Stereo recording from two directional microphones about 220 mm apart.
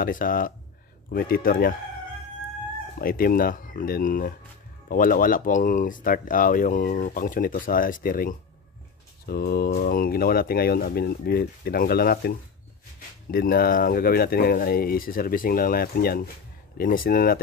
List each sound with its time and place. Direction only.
0.0 s speech: 40° left (ahead or behind)
3.0 s speech: 40° left (ahead or behind)